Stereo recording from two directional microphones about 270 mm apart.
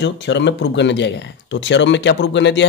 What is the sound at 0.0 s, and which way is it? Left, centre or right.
Speech, left.